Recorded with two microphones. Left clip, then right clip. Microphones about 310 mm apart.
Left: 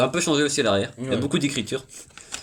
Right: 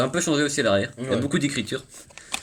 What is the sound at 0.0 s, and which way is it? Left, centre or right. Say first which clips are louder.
Speech: left 2 dB; centre.